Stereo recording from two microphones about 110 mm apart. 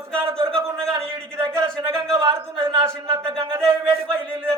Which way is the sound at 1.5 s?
25° right (ahead or behind).